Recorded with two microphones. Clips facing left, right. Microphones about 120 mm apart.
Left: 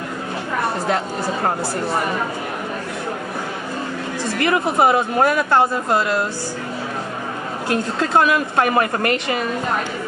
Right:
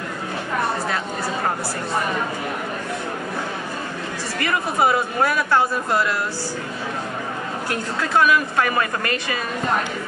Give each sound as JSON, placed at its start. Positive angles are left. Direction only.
{"t": 4.4, "sound": "speech", "side_deg": 25}
{"t": 8.1, "sound": "speech", "side_deg": 25}